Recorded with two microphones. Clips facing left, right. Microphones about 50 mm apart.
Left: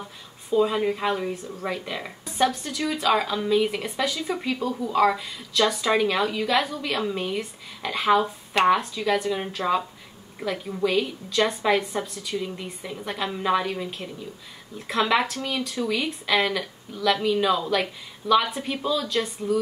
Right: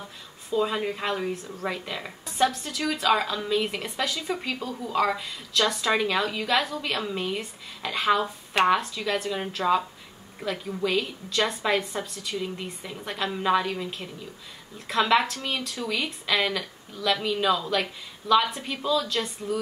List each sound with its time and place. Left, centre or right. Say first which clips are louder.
0.6 s a woman's voice: left 4 dB; centre
7.8 s a woman's voice: left 3 dB; centre